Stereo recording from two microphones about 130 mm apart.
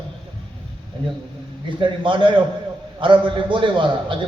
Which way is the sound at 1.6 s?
40° right (ahead or behind).